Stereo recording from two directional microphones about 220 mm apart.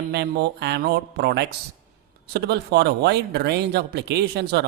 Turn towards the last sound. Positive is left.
turn(degrees=-50)  # may be behind; listen again after turning